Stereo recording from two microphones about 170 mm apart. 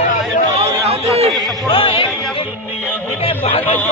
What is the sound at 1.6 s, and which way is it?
Music, 30° left (ahead or behind).